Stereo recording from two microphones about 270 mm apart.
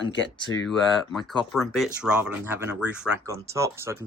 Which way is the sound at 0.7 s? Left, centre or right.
Centre.